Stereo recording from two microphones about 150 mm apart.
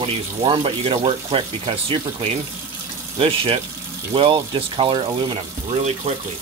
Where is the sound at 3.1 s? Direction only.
40° right (ahead or behind).